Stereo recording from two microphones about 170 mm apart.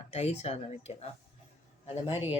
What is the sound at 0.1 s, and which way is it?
Speech, 40° left (ahead or behind).